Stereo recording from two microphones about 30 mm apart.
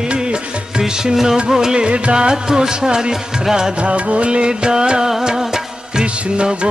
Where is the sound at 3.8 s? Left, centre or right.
Right.